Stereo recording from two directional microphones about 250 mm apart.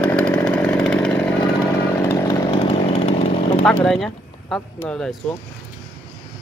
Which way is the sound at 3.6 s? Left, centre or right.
Centre.